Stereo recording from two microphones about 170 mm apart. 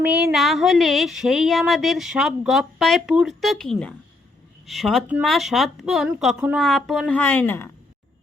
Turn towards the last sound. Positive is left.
turn(degrees=15)  # may be behind; listen again after turning